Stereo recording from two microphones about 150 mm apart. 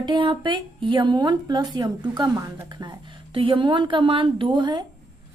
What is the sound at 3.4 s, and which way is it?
A woman's voice, 35° right (ahead or behind).